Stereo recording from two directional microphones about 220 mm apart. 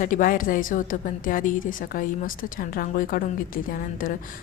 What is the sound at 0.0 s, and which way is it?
A woman's voice, 35° left (ahead or behind).